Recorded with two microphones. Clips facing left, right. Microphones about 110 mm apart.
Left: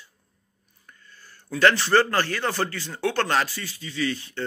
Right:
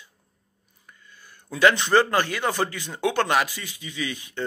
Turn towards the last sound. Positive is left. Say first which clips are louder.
# left 3 dB
turn(degrees=-15)  # may be behind; listen again after turning